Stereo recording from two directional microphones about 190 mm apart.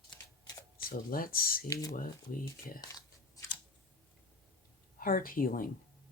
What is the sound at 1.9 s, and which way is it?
Speech, 50° left (ahead or behind).